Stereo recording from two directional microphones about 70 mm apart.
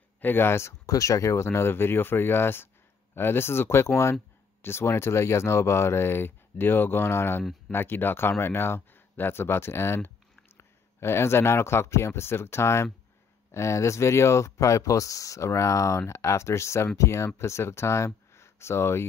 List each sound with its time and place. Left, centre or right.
0.2 s speech: left
0.8 s speech: left